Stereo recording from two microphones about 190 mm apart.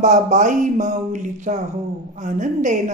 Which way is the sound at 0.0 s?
40° right (ahead or behind).